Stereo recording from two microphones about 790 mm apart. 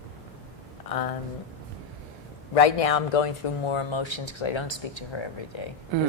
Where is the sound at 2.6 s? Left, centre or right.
Left.